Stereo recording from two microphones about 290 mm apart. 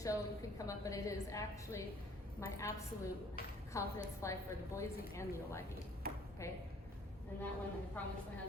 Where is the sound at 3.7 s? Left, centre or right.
Centre.